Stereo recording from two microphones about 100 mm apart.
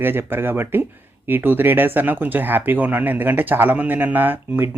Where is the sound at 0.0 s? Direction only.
20° right (ahead or behind).